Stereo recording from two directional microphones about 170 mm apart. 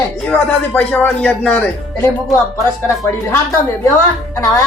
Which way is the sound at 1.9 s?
20° left (ahead or behind).